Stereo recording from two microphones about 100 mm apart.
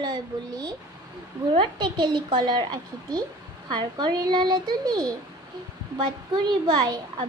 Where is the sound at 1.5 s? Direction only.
55° right (ahead or behind).